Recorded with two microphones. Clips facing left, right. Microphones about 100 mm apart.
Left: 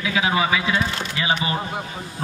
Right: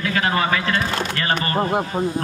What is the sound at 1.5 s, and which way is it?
Speech, 50° right (ahead or behind).